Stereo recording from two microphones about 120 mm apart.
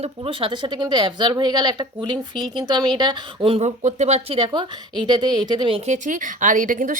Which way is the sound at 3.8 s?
70° right (ahead or behind).